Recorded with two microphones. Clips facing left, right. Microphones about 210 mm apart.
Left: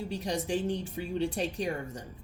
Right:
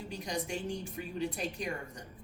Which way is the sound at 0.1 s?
30° left (ahead or behind).